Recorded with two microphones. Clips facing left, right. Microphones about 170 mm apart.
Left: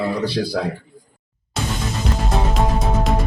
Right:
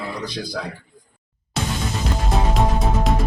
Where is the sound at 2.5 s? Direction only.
Centre (ahead or behind).